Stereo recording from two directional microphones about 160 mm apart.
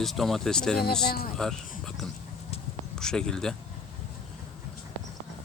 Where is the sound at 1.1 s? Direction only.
75° left (ahead or behind).